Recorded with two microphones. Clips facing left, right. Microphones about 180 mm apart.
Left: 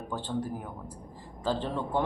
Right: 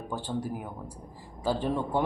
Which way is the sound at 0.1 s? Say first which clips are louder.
Even; 10° right (ahead or behind).